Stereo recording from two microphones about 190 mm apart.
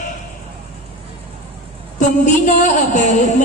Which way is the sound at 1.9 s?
40° left (ahead or behind).